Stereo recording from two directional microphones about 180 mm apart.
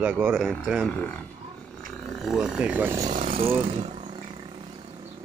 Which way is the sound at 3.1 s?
30° right (ahead or behind).